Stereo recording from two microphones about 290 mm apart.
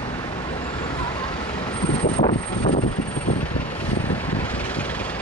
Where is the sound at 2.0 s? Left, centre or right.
Left.